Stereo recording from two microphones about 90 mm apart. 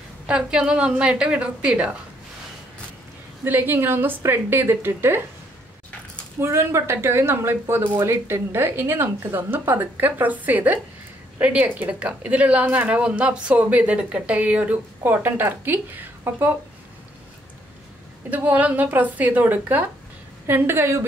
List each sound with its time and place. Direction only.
0.3 s a woman's voice: 10° right (ahead or behind)
3.4 s a woman's voice: 25° right (ahead or behind)
6.4 s a woman's voice: 25° right (ahead or behind)
18.3 s a woman's voice: 15° right (ahead or behind)